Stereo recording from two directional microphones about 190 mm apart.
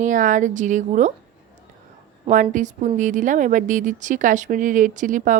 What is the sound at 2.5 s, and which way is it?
Speech, 40° right (ahead or behind).